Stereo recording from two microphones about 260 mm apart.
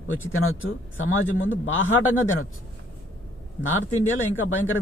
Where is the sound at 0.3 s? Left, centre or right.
Left.